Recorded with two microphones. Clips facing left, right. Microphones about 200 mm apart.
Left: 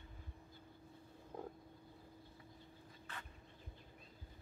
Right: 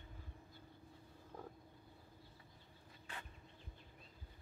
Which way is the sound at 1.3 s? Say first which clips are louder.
Left 4 dB; 20° left (ahead or behind).